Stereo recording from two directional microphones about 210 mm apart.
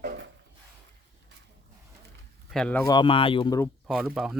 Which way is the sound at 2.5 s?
5° left (ahead or behind).